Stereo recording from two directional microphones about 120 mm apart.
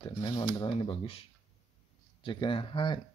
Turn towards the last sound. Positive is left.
turn(degrees=45)  # may be behind; listen again after turning